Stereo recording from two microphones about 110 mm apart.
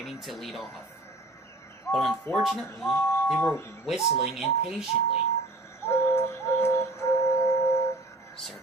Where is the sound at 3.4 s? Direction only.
20° left (ahead or behind).